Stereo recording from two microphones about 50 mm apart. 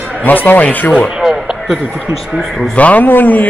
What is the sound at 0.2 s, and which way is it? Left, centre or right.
Speech, left.